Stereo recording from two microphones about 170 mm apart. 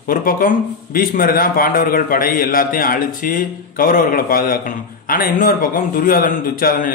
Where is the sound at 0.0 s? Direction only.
55° left (ahead or behind).